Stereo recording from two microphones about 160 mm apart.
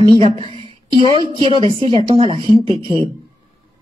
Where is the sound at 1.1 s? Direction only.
30° right (ahead or behind).